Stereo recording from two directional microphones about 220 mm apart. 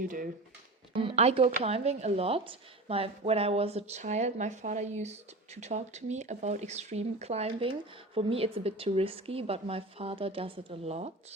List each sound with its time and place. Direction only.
0.0 s speech: 40° right (ahead or behind)
0.9 s speech: 25° right (ahead or behind)